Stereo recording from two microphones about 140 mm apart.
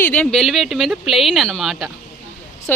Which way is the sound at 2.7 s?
15° left (ahead or behind).